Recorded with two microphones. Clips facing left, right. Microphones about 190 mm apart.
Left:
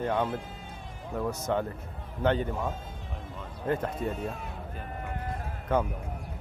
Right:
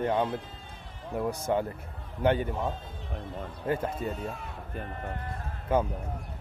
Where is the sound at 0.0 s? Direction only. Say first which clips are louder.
Right 1 dB; 10° right (ahead or behind).